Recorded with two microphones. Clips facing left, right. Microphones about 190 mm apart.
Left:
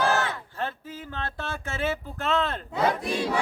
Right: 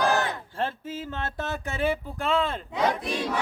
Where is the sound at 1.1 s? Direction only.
20° right (ahead or behind).